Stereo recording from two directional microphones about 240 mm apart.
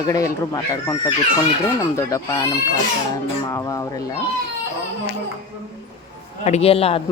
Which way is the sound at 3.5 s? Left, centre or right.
Centre.